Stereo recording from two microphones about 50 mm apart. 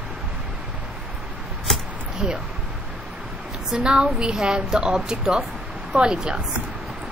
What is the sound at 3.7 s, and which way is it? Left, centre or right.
A woman's voice, centre.